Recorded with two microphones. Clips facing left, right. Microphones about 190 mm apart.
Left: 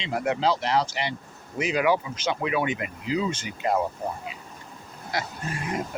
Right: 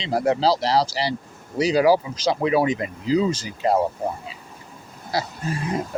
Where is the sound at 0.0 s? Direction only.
35° right (ahead or behind).